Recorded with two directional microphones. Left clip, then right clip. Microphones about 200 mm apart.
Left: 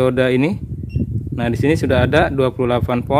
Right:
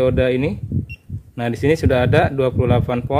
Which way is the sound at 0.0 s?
25° left (ahead or behind).